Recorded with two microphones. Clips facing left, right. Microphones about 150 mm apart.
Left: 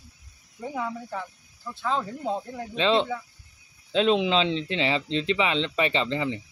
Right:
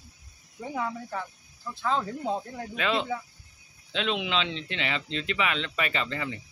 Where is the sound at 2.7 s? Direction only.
30° left (ahead or behind).